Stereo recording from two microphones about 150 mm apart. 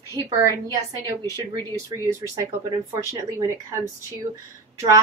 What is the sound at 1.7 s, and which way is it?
Speech, 20° right (ahead or behind).